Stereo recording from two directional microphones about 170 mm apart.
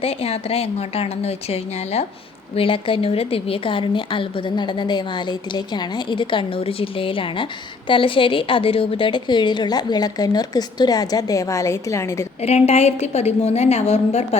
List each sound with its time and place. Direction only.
0.0 s a woman's voice: 35° left (ahead or behind); by 12.3 s 15° left (ahead or behind)
12.4 s a woman's voice: 40° left (ahead or behind)